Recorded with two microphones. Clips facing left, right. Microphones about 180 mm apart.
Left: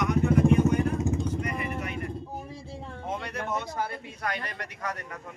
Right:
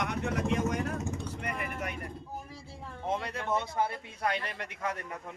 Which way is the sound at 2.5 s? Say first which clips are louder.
Left 5 dB; 25° left (ahead or behind).